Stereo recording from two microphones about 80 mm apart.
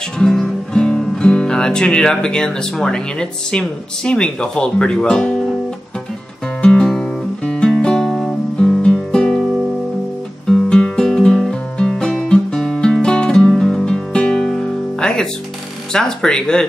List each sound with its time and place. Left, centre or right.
0.2 s speech: centre
6.6 s music: centre
10.4 s music: centre
15.9 s speech: centre